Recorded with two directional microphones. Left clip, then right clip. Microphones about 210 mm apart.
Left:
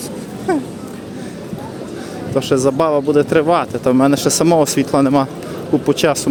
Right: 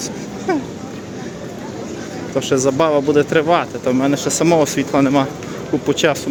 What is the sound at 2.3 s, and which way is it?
Speech, 15° left (ahead or behind).